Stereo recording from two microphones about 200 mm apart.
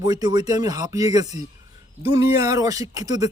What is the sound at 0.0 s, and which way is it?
Speech, 20° right (ahead or behind).